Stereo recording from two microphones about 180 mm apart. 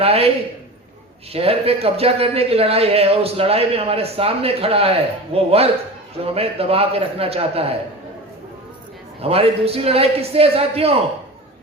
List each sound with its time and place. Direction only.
0.0 s a man's voice: 35° right (ahead or behind)
1.3 s a man's voice: 35° right (ahead or behind)
9.2 s a man's voice: 35° right (ahead or behind)